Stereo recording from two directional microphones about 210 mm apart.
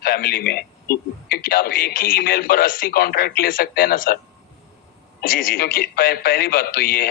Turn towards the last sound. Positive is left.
turn(degrees=45)  # may be behind; listen again after turning